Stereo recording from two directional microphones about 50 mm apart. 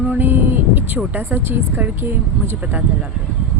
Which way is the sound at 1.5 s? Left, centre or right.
Right.